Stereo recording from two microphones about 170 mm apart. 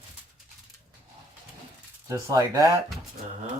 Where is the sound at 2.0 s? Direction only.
20° right (ahead or behind).